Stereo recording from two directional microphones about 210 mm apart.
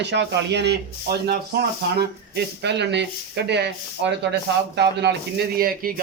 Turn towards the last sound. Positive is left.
turn(degrees=-45)  # may be behind; listen again after turning